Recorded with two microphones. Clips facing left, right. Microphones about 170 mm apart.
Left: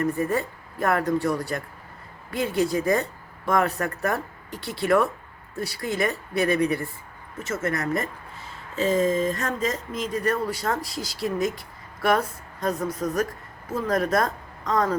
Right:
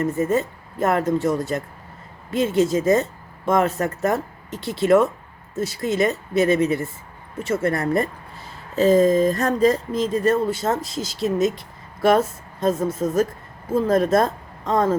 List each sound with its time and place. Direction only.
0.0 s speech: 20° right (ahead or behind)